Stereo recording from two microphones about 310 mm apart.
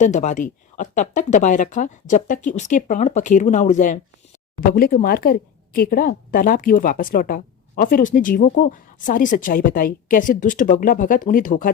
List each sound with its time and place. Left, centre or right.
0.0 s a woman's voice: left